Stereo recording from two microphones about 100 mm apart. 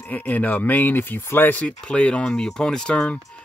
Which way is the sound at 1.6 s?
10° left (ahead or behind).